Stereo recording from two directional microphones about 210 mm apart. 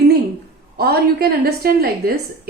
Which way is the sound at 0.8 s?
50° right (ahead or behind).